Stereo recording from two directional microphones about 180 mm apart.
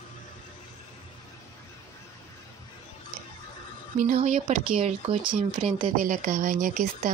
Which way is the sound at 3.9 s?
45° right (ahead or behind).